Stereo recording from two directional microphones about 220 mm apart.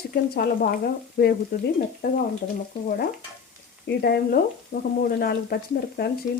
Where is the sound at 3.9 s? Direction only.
45° left (ahead or behind).